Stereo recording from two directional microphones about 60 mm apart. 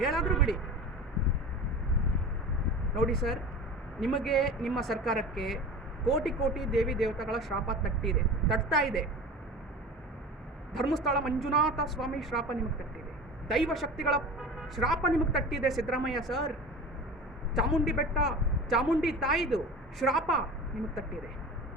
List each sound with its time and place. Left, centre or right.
0.0 s a sound: centre
2.9 s speech: centre
10.8 s speech: centre
17.5 s speech: centre